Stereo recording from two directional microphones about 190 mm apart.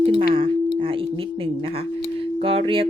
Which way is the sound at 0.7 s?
30° right (ahead or behind).